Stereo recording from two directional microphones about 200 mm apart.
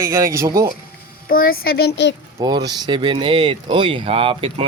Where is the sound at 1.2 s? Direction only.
45° left (ahead or behind).